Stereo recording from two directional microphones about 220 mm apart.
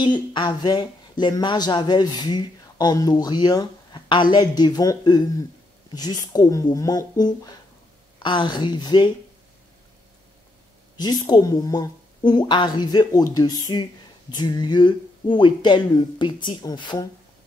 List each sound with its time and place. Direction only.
0.0 s speech: 20° left (ahead or behind)
11.0 s speech: 20° left (ahead or behind)